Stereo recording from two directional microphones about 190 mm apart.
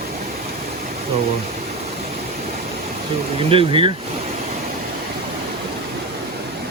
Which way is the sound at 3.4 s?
30° right (ahead or behind).